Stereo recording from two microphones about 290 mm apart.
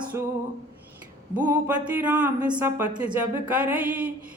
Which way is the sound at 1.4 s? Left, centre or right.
Centre.